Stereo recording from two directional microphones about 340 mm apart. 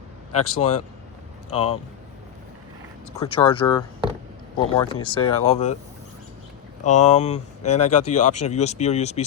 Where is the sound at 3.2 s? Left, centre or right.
Centre.